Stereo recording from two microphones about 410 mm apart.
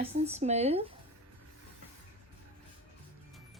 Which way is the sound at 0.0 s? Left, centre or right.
Centre.